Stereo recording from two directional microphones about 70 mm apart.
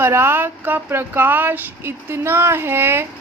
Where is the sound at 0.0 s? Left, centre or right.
Right.